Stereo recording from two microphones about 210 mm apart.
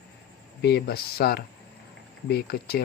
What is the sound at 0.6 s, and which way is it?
Speech, 50° left (ahead or behind).